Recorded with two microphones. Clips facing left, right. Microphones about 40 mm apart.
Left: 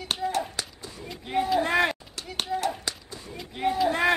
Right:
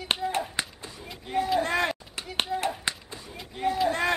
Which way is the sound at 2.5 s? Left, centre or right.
Centre.